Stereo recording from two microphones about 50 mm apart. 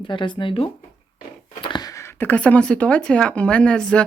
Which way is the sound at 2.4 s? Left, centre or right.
Left.